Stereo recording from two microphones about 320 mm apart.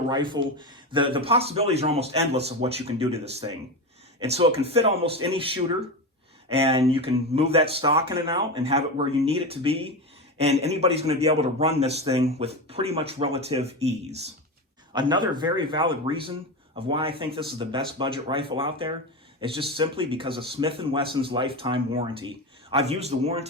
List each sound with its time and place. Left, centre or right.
0.4 s a man's voice: centre
14.9 s a man's voice: centre